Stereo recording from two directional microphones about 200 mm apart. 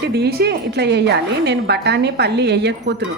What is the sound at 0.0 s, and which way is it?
A woman's voice, 55° right (ahead or behind).